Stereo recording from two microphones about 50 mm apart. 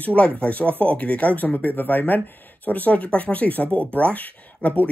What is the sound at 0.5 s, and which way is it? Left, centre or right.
Speech, left.